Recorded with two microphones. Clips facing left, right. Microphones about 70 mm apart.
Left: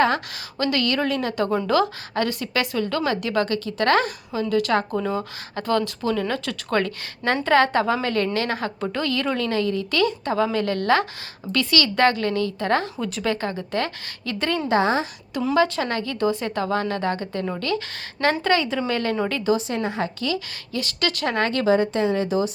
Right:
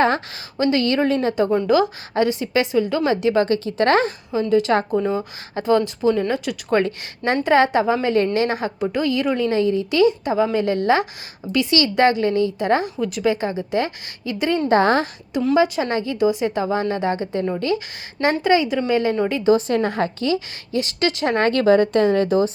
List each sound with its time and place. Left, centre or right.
0.6 s a woman's voice: right
1.6 s a woman's voice: centre
14.7 s a woman's voice: right
15.5 s a woman's voice: centre
19.5 s a woman's voice: right
20.1 s a woman's voice: right
21.4 s a woman's voice: right